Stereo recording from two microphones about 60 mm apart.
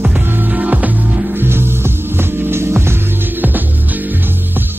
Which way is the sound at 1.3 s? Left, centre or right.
Right.